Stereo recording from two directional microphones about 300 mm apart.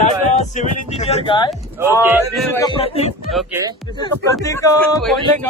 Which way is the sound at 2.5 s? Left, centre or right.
Centre.